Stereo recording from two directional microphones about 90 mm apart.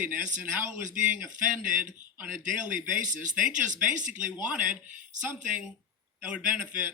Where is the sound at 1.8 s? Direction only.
20° right (ahead or behind).